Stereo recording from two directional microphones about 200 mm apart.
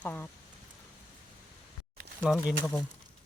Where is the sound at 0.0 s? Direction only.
10° left (ahead or behind).